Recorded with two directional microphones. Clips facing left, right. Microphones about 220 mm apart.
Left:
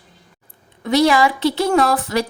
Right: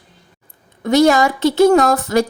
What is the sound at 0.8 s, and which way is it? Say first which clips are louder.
Speech: right 3 dB; 45° right (ahead or behind).